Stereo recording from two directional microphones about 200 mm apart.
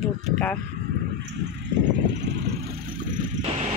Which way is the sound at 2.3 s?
60° right (ahead or behind).